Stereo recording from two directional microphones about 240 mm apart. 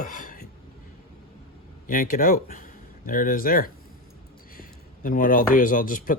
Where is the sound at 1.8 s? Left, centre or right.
Left.